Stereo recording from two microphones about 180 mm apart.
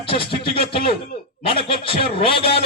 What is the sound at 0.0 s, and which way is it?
A man's voice, 30° left (ahead or behind).